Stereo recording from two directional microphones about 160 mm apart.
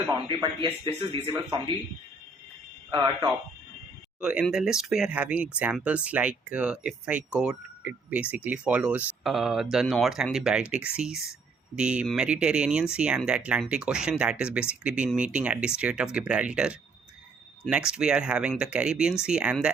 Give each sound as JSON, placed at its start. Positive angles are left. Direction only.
{"t": 0.3, "sound": "speech", "side_deg": -30}
{"t": 2.9, "sound": "speech", "side_deg": -25}
{"t": 4.2, "sound": "speech", "side_deg": -5}